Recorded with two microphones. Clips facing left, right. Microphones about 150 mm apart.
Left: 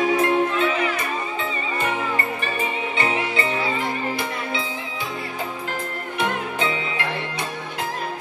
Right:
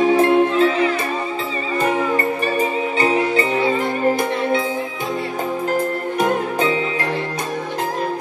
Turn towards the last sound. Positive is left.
turn(degrees=-40)  # may be behind; listen again after turning